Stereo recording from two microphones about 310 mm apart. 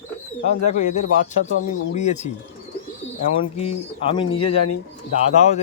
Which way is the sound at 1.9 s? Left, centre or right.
Left.